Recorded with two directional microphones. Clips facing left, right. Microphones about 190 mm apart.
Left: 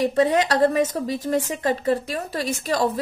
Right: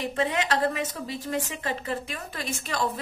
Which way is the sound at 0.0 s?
40° left (ahead or behind).